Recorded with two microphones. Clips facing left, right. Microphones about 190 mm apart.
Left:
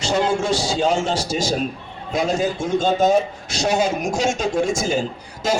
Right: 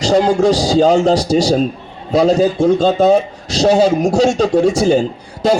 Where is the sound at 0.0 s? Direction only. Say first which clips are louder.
Right 8 dB; 35° right (ahead or behind).